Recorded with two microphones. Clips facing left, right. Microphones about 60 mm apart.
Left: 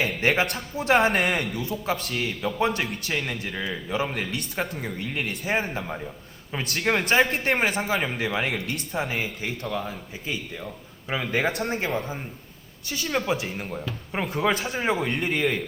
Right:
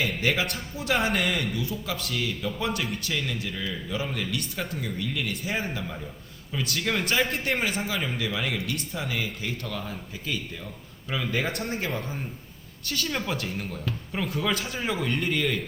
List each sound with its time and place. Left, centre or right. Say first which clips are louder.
0.2 s speech: left 3 dB; left
1.5 s speech: left 3 dB; left
3.0 s a man's voice: left 2 dB; left
4.9 s a man's voice: left 1 dB; left
12.8 s speech: left 3 dB; centre
13.6 s a man's voice: left 1 dB; left